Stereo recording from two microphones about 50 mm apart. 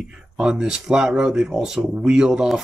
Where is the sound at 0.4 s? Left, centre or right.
Centre.